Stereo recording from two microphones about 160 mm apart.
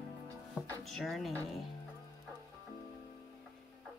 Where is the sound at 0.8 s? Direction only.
Centre (ahead or behind).